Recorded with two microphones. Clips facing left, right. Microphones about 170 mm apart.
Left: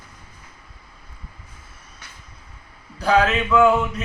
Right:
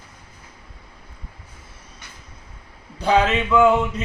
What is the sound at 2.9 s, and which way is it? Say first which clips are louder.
Speech: even; 25° right (ahead or behind).